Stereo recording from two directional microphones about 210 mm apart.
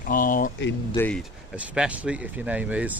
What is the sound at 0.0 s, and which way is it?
Speech, 40° left (ahead or behind).